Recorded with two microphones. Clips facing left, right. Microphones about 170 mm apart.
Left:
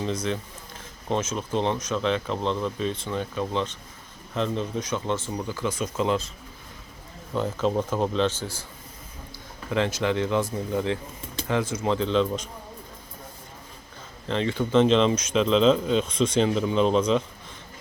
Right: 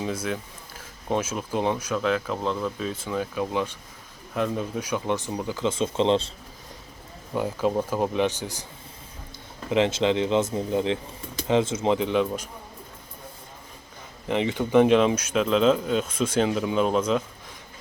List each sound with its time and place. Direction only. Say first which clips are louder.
0.0 s speech: left 1 dB; 5° right (ahead or behind); by 6.3 s 30° right (ahead or behind)
7.3 s speech: even; 10° right (ahead or behind)
9.6 s speech: right 3 dB; 20° right (ahead or behind)
14.3 s speech: right 1 dB; 15° right (ahead or behind)